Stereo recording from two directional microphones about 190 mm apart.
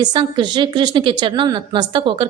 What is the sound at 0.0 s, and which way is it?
A woman's voice, 25° right (ahead or behind).